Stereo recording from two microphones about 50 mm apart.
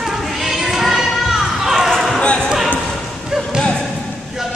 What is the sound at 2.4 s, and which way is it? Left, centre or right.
Basketball bounce, centre.